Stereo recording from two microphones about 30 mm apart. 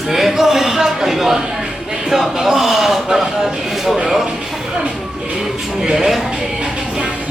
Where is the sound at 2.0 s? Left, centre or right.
Centre.